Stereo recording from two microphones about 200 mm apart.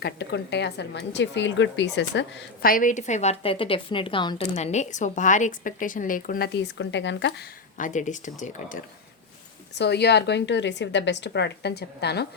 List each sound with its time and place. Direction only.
0.0 s a woman's voice: 60° left (ahead or behind)
2.6 s speech: 40° left (ahead or behind); by 4.4 s 25° left (ahead or behind)
4.5 s a woman's voice: 35° left (ahead or behind); by 7.4 s 65° left (ahead or behind)
7.8 s a woman's voice: 40° left (ahead or behind)
9.7 s a woman's voice: 55° left (ahead or behind)